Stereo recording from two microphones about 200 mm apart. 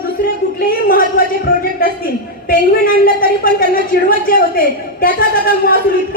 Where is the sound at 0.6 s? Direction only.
45° left (ahead or behind).